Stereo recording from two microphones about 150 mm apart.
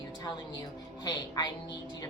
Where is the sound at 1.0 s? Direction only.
30° left (ahead or behind).